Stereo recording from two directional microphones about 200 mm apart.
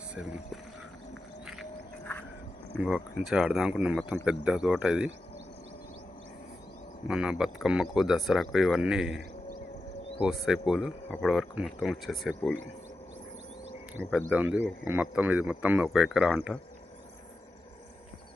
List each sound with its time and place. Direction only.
0.1 s speech: 5° right (ahead or behind)
2.7 s speech: centre (ahead or behind)
7.1 s speech: 5° right (ahead or behind)
14.0 s speech: centre (ahead or behind)